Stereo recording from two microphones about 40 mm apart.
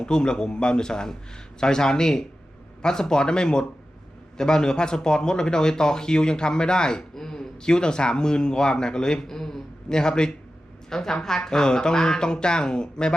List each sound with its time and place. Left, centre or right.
0.0 s speech: centre